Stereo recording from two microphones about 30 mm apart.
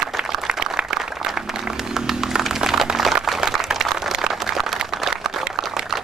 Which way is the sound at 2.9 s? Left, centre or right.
Centre.